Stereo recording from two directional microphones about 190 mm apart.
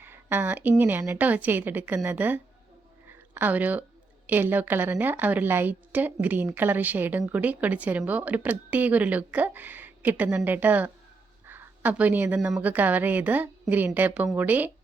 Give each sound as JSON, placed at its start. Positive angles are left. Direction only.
{"t": 0.0, "sound": "a woman's voice", "side_deg": -10}